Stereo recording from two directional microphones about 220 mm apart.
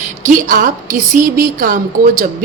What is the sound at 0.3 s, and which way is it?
A woman's voice, 35° right (ahead or behind).